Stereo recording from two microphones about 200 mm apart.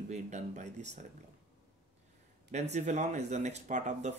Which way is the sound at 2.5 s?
35° right (ahead or behind).